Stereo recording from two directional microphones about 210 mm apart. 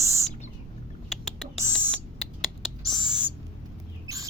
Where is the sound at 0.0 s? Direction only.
15° right (ahead or behind).